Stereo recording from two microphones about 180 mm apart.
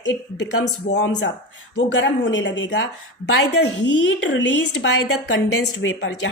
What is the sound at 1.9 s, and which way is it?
A woman's voice, 90° left.